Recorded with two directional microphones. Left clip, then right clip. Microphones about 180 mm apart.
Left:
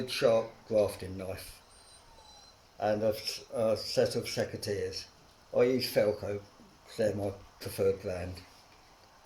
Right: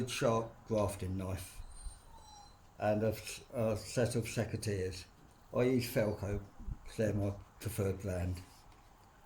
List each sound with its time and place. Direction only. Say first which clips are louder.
0.0 s speech: left 6 dB; 40° right (ahead or behind)
2.7 s speech: left 4 dB; 40° right (ahead or behind)